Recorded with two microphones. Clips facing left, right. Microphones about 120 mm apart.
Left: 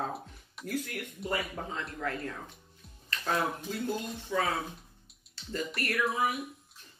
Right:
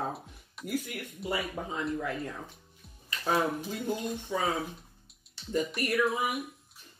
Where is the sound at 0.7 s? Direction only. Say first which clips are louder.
Right 1 dB; 10° right (ahead or behind).